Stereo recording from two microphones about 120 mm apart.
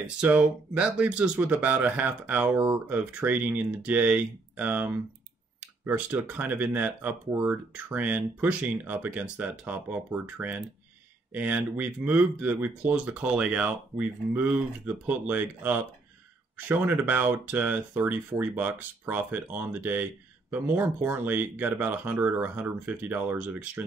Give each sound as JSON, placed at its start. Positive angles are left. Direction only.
{"t": 0.0, "sound": "speech", "side_deg": -10}